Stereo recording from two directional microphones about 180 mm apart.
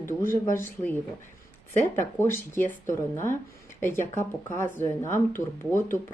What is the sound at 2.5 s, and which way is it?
Speech, 15° left (ahead or behind).